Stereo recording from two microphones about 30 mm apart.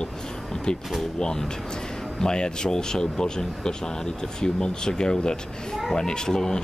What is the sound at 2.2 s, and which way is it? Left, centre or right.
Speech, left.